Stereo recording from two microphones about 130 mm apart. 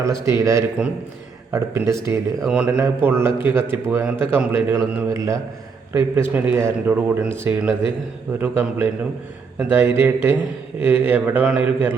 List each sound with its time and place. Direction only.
0.0 s a man's voice: 25° right (ahead or behind)
2.4 s a man's voice: 10° right (ahead or behind)